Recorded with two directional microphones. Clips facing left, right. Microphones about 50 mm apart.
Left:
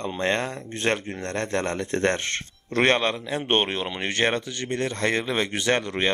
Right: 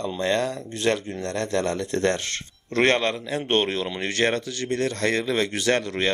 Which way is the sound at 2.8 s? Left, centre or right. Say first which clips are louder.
Even; centre.